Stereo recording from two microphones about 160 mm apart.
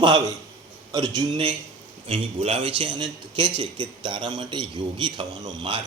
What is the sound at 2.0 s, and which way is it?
A man's voice, 40° right (ahead or behind).